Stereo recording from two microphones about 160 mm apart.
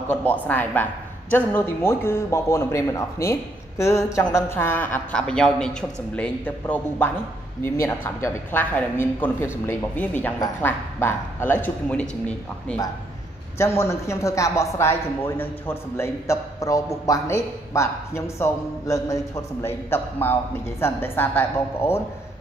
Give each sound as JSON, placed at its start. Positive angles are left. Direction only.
{"t": 0.1, "sound": "speech", "side_deg": 10}